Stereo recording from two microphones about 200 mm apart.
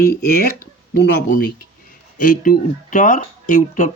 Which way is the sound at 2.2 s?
40° left (ahead or behind).